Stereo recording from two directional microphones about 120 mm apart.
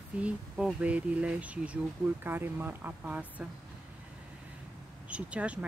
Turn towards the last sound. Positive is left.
turn(degrees=-10)  # may be behind; listen again after turning